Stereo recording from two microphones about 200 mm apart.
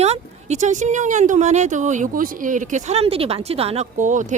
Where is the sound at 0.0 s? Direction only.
35° right (ahead or behind).